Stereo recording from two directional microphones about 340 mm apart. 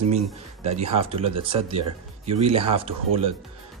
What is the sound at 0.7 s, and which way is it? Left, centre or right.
Speech, centre.